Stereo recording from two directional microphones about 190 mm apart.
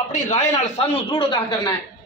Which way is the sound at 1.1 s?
25° left (ahead or behind).